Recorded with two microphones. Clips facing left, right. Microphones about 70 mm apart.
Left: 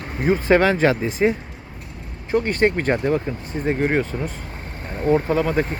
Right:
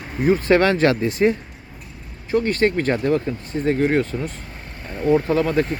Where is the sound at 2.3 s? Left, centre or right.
Left.